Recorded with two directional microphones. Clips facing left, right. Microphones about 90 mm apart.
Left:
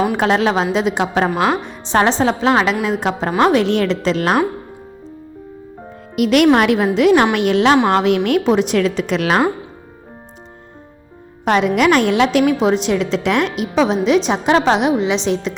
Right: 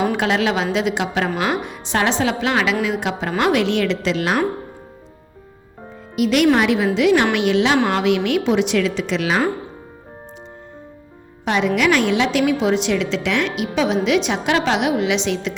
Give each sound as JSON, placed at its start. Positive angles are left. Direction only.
{"t": 0.2, "sound": "a woman's voice", "side_deg": 40}
{"t": 6.1, "sound": "a woman's voice", "side_deg": 55}
{"t": 11.4, "sound": "a woman's voice", "side_deg": 45}